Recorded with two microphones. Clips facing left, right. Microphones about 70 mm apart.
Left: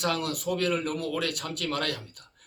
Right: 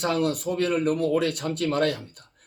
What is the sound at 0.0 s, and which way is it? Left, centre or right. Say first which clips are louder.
Speech: right 4 dB; right.